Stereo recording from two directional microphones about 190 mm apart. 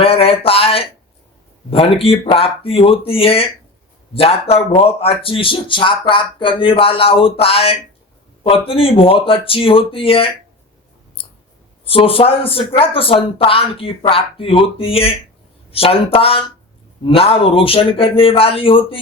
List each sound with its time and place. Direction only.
0.0 s a sound: 30° left (ahead or behind)
1.7 s speech: 30° left (ahead or behind)
11.9 s speech: 30° left (ahead or behind)